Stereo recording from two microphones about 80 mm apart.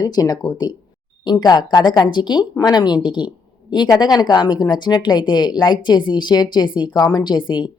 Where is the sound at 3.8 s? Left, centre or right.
Left.